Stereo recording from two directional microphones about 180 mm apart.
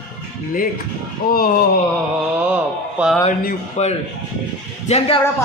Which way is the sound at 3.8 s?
40° left (ahead or behind).